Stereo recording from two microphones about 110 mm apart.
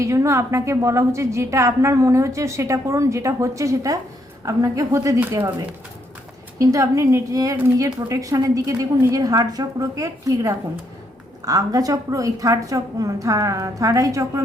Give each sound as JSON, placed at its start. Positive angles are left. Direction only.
{"t": 0.0, "sound": "a woman's voice", "side_deg": -25}
{"t": 7.5, "sound": "a woman's voice", "side_deg": -20}
{"t": 7.9, "sound": "a woman's voice", "side_deg": -30}